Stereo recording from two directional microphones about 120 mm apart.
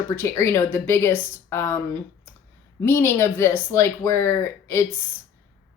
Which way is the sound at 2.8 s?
20° left (ahead or behind).